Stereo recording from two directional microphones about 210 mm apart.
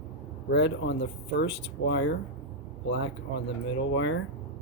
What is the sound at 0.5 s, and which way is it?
Speech, 60° left (ahead or behind).